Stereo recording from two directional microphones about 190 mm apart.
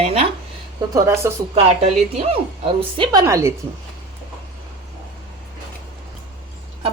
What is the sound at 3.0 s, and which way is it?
Speech, 20° right (ahead or behind).